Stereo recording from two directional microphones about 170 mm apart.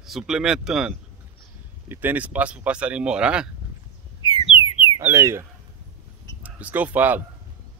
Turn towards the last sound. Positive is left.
turn(degrees=-10)  # may be behind; listen again after turning